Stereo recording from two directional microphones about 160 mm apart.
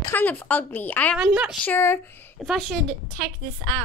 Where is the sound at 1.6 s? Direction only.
15° left (ahead or behind).